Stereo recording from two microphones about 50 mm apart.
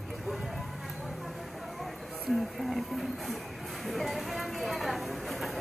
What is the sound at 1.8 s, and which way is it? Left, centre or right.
Speech, centre.